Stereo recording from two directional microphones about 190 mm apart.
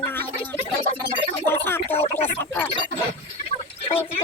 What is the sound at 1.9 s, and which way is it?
Speech, 30° left (ahead or behind).